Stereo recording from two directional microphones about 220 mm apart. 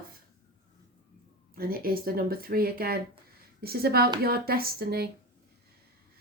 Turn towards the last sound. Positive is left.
turn(degrees=-45)  # may be behind; listen again after turning